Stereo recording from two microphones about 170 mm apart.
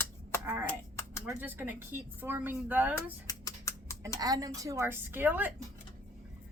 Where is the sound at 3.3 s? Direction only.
20° left (ahead or behind).